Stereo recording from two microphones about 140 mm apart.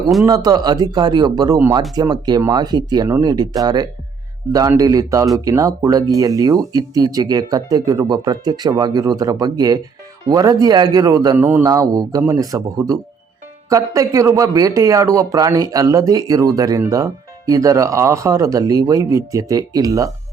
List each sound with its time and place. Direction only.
0.3 s speech: 30° right (ahead or behind)
11.3 s a man's voice: 15° right (ahead or behind)
11.6 s speech: 25° right (ahead or behind)